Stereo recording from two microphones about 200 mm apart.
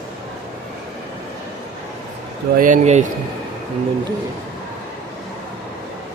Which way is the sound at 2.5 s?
40° right (ahead or behind).